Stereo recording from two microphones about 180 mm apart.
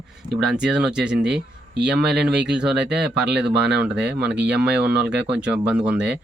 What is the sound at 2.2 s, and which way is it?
Speech, 65° right (ahead or behind).